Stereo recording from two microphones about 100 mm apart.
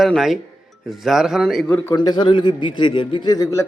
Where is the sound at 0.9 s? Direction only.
5° right (ahead or behind).